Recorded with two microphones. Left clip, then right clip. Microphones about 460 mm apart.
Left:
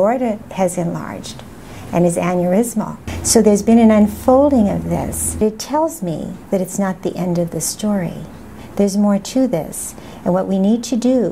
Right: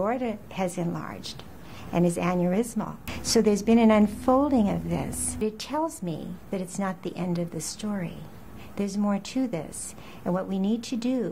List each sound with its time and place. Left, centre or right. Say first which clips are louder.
0.0 s a woman's voice: left 12 dB; left